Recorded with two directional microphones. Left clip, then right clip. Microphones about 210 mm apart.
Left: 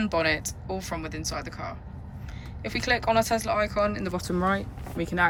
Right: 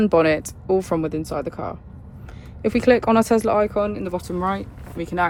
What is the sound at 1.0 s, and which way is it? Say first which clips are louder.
Speech: right 9 dB; 20° right (ahead or behind).